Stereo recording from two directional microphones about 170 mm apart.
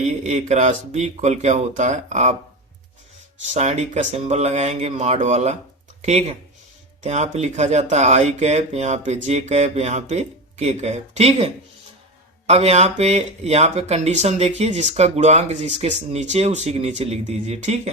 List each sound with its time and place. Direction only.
0.0 s speech: 40° right (ahead or behind)
3.4 s speech: 40° right (ahead or behind)